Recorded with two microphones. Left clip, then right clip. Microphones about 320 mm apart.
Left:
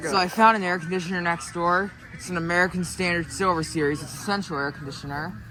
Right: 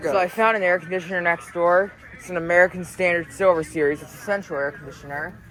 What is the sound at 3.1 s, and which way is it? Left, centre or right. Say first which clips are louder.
Speech: right 5 dB; centre.